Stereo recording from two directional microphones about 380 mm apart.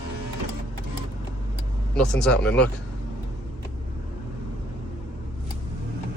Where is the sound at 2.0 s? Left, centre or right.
Centre.